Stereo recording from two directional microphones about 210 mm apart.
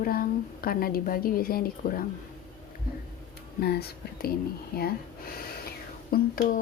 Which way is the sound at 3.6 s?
50° left (ahead or behind).